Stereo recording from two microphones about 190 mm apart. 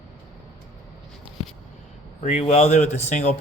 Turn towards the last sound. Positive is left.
turn(degrees=35)  # may be behind; listen again after turning